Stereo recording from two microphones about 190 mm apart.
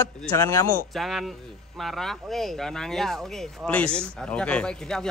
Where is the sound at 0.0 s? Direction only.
15° left (ahead or behind).